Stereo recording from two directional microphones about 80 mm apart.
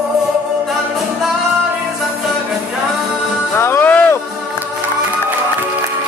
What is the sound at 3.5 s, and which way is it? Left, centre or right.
Music, left.